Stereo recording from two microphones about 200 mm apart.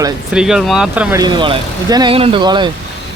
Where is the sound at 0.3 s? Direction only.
5° right (ahead or behind).